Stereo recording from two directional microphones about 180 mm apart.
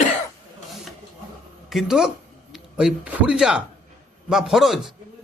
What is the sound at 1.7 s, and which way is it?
A man's voice, centre (ahead or behind).